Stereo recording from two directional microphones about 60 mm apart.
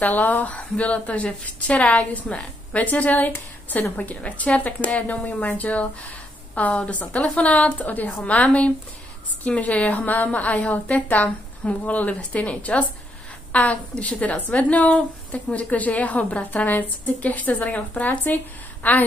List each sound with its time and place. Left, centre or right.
0.0 s a woman's voice: left